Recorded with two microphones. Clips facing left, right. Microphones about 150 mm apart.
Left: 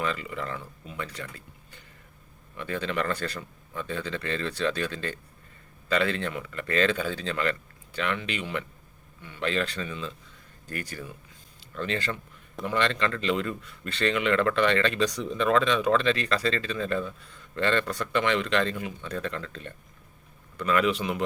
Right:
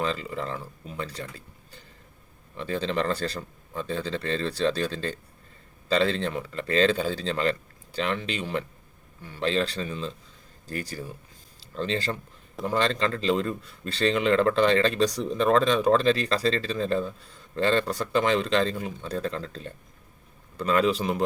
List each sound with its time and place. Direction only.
0.0 s a man's voice: 30° right (ahead or behind)
2.6 s a man's voice: 30° right (ahead or behind)